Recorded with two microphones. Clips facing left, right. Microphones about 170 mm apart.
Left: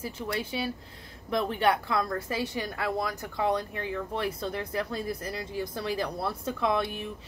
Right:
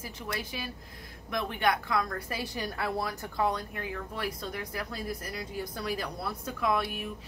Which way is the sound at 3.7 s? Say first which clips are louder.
Left 5 dB; 25° left (ahead or behind).